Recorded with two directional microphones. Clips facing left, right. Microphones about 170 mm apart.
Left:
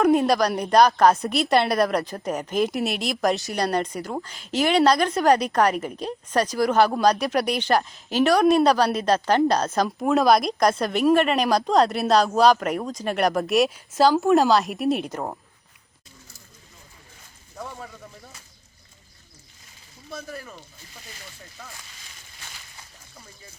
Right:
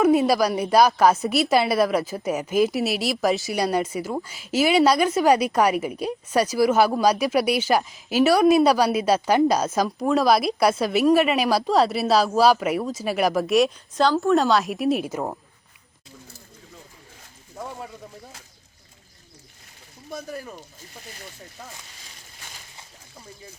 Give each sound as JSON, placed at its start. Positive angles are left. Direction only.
{"t": 0.0, "sound": "a woman's voice", "side_deg": -5}
{"t": 17.6, "sound": "a sound", "side_deg": -20}
{"t": 20.1, "sound": "speech", "side_deg": -15}